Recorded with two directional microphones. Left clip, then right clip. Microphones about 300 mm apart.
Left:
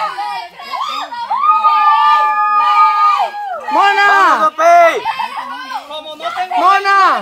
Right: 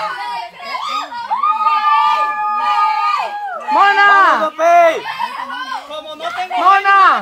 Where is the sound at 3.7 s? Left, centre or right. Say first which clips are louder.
Even; left.